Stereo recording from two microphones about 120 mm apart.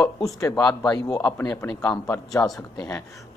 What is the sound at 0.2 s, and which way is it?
A man's voice, 30° left (ahead or behind).